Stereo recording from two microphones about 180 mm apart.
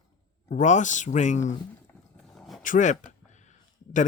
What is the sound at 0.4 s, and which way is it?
Speech, 40° left (ahead or behind).